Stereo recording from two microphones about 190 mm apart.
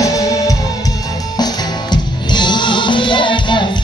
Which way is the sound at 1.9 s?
25° left (ahead or behind).